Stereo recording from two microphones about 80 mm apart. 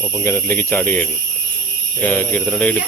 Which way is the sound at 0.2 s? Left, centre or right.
Left.